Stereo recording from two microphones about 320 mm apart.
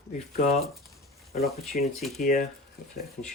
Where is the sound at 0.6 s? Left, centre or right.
Centre.